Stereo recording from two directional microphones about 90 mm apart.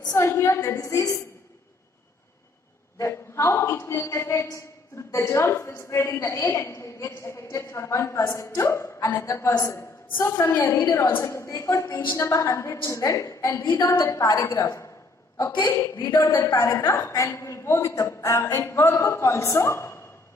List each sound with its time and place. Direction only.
0.2 s speech: 30° left (ahead or behind)
3.0 s a woman's voice: 30° left (ahead or behind)
15.5 s a man's voice: 50° left (ahead or behind)
16.0 s speech: 30° left (ahead or behind)